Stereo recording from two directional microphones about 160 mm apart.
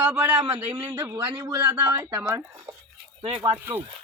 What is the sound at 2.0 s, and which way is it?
Speech, 20° right (ahead or behind).